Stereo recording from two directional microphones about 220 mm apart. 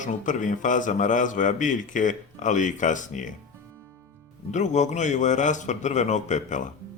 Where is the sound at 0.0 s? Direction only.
35° left (ahead or behind).